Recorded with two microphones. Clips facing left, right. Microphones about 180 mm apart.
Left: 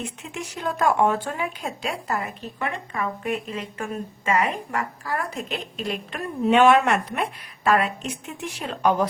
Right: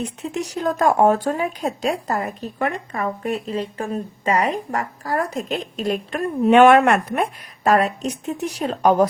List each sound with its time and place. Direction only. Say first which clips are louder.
0.0 s a woman's voice: right 7 dB; 40° right (ahead or behind)